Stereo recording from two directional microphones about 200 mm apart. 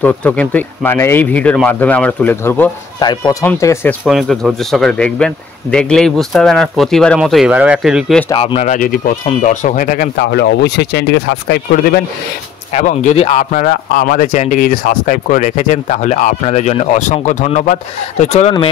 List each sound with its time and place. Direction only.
0.0 s speech: 5° left (ahead or behind)
3.0 s speech: 20° left (ahead or behind)
4.0 s speech: centre (ahead or behind)
8.3 s speech: 25° left (ahead or behind); by 10.2 s 45° left (ahead or behind)
10.2 s speech: 55° left (ahead or behind)
12.7 s speech: 35° left (ahead or behind)